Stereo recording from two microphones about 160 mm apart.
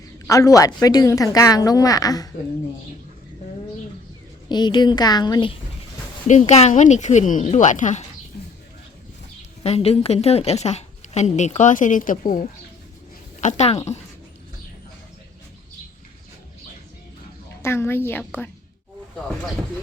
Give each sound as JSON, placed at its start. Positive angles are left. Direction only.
{"t": 0.3, "sound": "speech", "side_deg": 20}
{"t": 4.4, "sound": "speech", "side_deg": 30}
{"t": 6.2, "sound": "a woman's voice", "side_deg": 45}
{"t": 9.6, "sound": "a woman's voice", "side_deg": 40}
{"t": 13.4, "sound": "a woman's voice", "side_deg": 45}
{"t": 17.6, "sound": "a woman's voice", "side_deg": 15}